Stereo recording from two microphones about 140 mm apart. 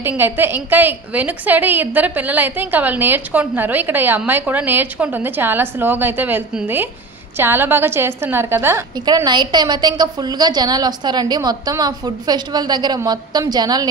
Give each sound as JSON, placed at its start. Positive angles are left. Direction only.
{"t": 0.0, "sound": "a woman's voice", "side_deg": -15}
{"t": 9.0, "sound": "a woman's voice", "side_deg": -30}